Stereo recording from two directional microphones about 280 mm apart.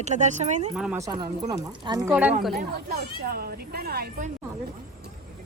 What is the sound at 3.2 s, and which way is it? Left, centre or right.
A woman's voice, right.